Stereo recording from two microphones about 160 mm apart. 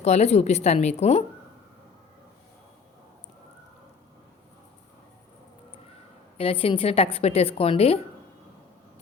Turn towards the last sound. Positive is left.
turn(degrees=35)  # may be behind; listen again after turning